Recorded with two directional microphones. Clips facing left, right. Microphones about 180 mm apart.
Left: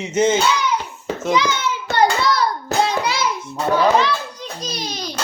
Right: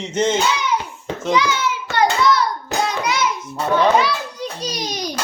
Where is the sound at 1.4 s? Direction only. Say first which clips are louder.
Right 1 dB; 25° left (ahead or behind).